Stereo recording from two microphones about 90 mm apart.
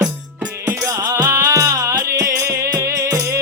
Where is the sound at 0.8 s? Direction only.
40° right (ahead or behind).